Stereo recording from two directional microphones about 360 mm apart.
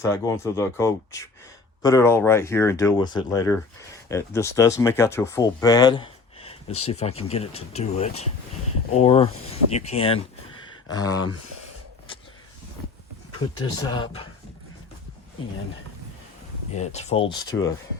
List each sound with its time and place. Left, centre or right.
0.0 s speech: centre
13.6 s speech: centre
16.7 s speech: centre